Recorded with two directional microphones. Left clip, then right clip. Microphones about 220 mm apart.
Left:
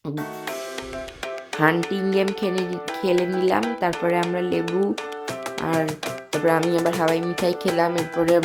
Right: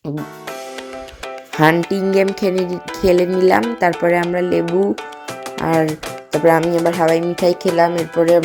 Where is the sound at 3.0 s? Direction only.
20° right (ahead or behind).